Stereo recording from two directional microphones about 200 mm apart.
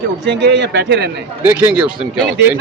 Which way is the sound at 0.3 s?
55° right (ahead or behind).